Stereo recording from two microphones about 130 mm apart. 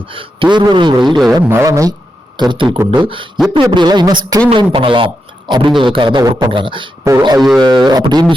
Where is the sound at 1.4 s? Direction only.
20° right (ahead or behind).